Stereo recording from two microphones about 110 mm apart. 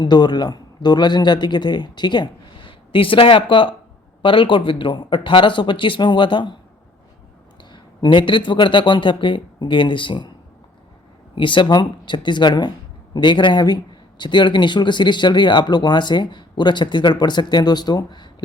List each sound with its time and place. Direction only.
0.0 s speech: 40° left (ahead or behind)
7.6 s speech: 45° left (ahead or behind)
11.3 s speech: 50° left (ahead or behind)